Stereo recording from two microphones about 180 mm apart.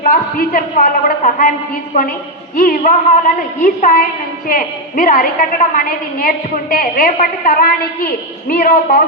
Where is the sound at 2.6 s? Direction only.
50° left (ahead or behind).